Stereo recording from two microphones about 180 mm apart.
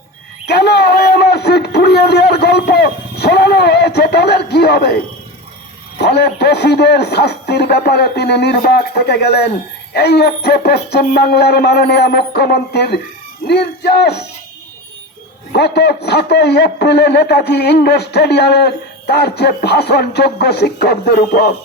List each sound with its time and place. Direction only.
0.4 s a sound: 65° left (ahead or behind)
6.1 s a man's voice: 65° left (ahead or behind)
15.5 s a man's voice: 65° left (ahead or behind)